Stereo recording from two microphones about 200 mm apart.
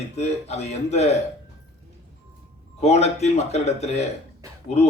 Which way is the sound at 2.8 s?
35° left (ahead or behind).